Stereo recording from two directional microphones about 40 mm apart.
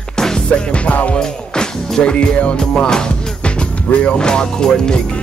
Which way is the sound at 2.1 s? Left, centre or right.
Left.